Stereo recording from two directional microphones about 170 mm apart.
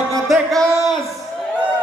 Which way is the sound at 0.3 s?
Centre (ahead or behind).